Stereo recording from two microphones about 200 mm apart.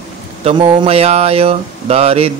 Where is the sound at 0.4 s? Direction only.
30° right (ahead or behind).